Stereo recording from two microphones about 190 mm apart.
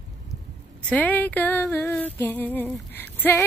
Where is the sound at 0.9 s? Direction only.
10° left (ahead or behind).